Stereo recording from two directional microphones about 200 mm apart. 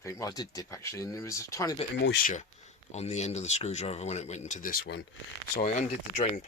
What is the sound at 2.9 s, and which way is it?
Speech, 35° left (ahead or behind).